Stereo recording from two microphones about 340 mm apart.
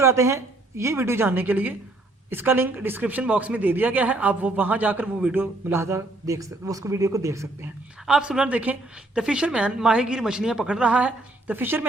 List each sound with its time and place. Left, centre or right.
0.0 s speech: centre